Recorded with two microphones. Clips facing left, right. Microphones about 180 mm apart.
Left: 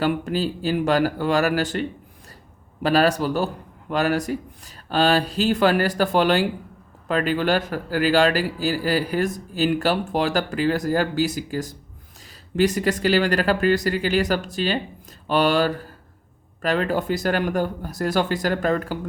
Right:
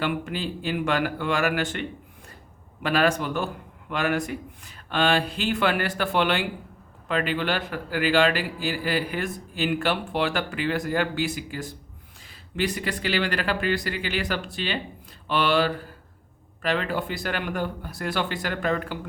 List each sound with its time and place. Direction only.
0.0 s speech: 40° left (ahead or behind)